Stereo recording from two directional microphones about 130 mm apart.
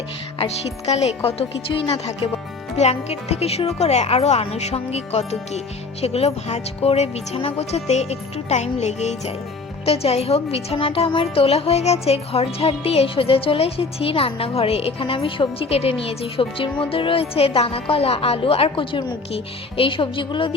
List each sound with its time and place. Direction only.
0.3 s a woman's voice: 55° left (ahead or behind)